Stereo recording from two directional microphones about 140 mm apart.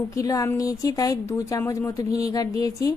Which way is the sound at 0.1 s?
25° left (ahead or behind).